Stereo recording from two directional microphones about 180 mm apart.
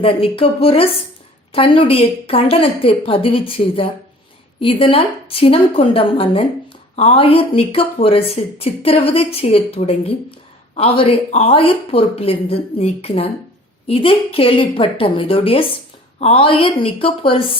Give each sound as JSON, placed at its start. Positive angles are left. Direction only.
{"t": 0.0, "sound": "speech", "side_deg": 30}